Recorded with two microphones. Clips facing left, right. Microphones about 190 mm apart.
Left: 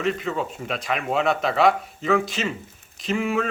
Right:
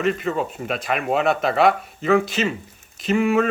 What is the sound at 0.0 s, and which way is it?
Speech, 55° right (ahead or behind).